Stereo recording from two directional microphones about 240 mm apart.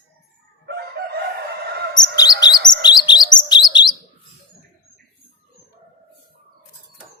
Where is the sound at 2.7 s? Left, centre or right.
Centre.